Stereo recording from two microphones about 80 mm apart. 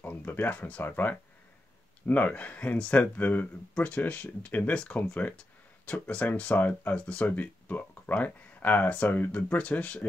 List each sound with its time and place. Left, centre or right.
0.0 s speech: left